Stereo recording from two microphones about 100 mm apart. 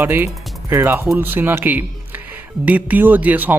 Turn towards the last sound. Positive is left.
turn(degrees=-20)  # may be behind; listen again after turning